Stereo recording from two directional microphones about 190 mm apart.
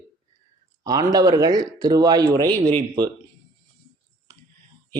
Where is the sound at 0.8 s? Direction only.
20° right (ahead or behind).